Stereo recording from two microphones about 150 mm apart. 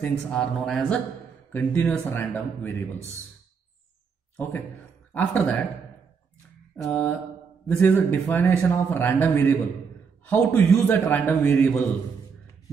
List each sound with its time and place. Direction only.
0.0 s speech: 5° left (ahead or behind)
5.1 s speech: 10° left (ahead or behind)
6.8 s speech: 10° left (ahead or behind)